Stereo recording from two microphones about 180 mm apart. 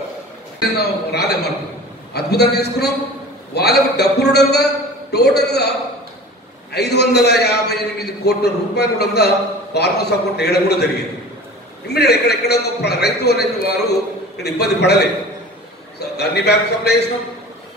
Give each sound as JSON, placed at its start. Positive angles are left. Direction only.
{"t": 0.7, "sound": "a man's voice", "side_deg": 65}
{"t": 6.7, "sound": "a man's voice", "side_deg": 65}
{"t": 11.9, "sound": "a man's voice", "side_deg": 65}
{"t": 16.2, "sound": "a man's voice", "side_deg": 65}